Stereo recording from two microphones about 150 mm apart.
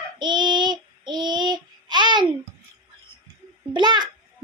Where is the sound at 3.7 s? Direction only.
30° right (ahead or behind).